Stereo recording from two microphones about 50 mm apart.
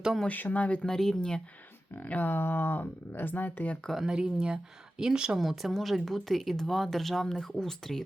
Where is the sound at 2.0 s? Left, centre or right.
Left.